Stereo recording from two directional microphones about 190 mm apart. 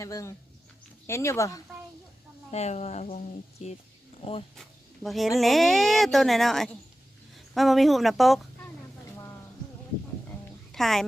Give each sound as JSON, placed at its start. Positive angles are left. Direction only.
{"t": 0.0, "sound": "speech", "side_deg": 15}
{"t": 2.5, "sound": "speech", "side_deg": 35}
{"t": 5.0, "sound": "a woman's voice", "side_deg": 0}
{"t": 10.7, "sound": "speech", "side_deg": 0}